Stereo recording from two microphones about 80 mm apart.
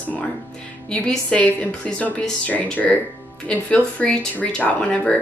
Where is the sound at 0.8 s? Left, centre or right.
Centre.